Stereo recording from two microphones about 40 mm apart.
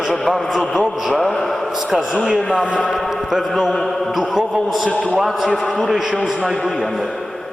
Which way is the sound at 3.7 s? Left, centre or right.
Centre.